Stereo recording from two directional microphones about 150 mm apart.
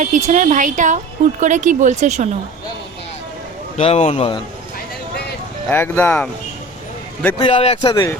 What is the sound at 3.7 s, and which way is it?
Speech, 45° left (ahead or behind).